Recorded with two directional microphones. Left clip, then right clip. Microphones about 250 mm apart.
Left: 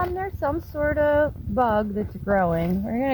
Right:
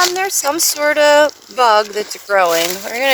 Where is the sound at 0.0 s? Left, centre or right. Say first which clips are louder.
Right 10 dB; right.